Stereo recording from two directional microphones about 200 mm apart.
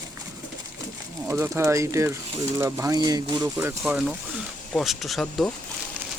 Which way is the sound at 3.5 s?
5° right (ahead or behind).